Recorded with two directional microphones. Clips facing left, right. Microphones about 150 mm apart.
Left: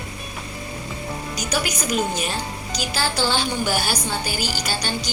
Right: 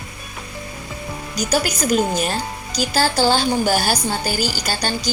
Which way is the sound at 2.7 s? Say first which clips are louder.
Right 6 dB; 40° right (ahead or behind).